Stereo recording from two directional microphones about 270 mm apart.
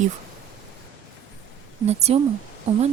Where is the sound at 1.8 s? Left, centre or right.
Right.